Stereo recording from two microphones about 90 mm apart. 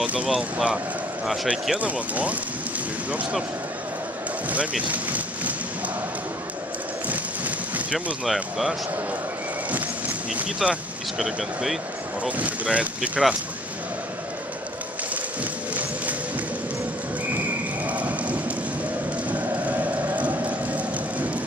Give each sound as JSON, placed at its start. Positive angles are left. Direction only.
{"t": 0.0, "sound": "speech", "side_deg": -15}
{"t": 4.5, "sound": "speech", "side_deg": -15}
{"t": 7.1, "sound": "a sound", "side_deg": -15}
{"t": 8.3, "sound": "speech", "side_deg": 0}
{"t": 9.7, "sound": "speech", "side_deg": -15}
{"t": 12.3, "sound": "speech", "side_deg": -15}
{"t": 15.7, "sound": "music", "side_deg": -15}
{"t": 17.8, "sound": "rain", "side_deg": -15}
{"t": 19.3, "sound": "a sound", "side_deg": -15}